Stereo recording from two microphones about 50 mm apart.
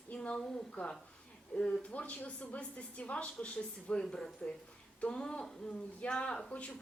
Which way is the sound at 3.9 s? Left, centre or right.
Centre.